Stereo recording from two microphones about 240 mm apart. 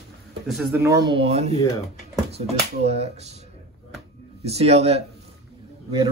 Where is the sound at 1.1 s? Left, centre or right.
Right.